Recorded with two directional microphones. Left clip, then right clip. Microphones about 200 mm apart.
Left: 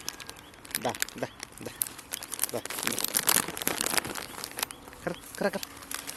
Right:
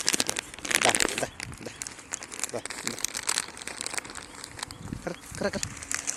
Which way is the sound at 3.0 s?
50° left (ahead or behind).